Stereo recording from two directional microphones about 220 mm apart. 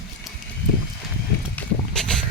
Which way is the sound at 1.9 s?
5° left (ahead or behind).